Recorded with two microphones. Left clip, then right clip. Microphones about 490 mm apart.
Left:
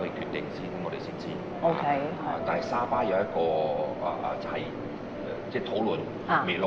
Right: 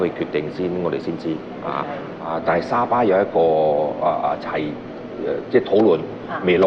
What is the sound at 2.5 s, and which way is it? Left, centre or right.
A man's voice, right.